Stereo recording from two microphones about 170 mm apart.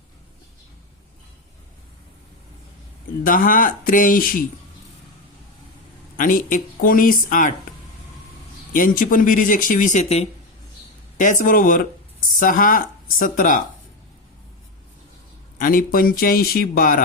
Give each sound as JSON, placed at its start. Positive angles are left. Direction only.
{"t": 3.2, "sound": "speech", "side_deg": 55}
{"t": 6.1, "sound": "speech", "side_deg": 50}
{"t": 8.7, "sound": "speech", "side_deg": 50}
{"t": 15.5, "sound": "speech", "side_deg": 55}